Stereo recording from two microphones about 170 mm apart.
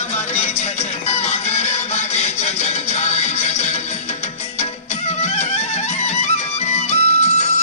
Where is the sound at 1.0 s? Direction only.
40° left (ahead or behind).